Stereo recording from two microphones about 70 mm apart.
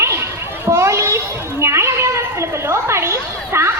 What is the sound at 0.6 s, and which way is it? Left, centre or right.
Children playing, right.